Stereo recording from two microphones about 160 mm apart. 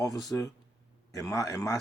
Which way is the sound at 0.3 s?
20° left (ahead or behind).